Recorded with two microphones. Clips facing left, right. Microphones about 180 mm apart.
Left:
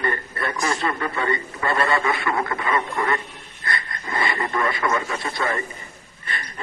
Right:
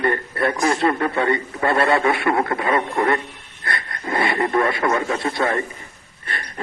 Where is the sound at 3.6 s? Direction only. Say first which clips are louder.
Right 3 dB; 65° right (ahead or behind); by 4.8 s 45° right (ahead or behind).